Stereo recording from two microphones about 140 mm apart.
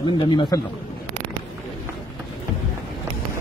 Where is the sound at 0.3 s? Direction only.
30° left (ahead or behind).